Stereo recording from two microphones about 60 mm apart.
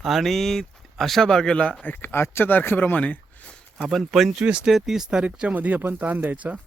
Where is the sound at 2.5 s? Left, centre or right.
Left.